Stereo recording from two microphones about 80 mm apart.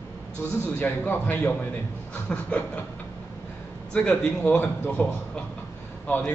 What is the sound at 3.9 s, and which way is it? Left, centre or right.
A man's voice, centre.